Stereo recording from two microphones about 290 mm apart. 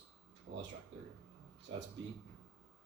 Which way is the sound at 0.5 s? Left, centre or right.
Right.